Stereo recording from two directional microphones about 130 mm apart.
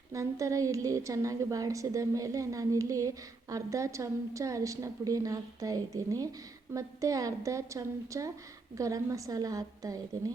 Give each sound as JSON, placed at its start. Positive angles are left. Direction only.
{"t": 0.1, "sound": "a woman's voice", "side_deg": -25}